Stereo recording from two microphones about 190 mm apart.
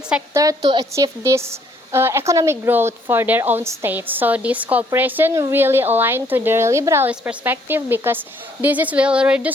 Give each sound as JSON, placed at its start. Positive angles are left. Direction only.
{"t": 0.3, "sound": "speech", "side_deg": -20}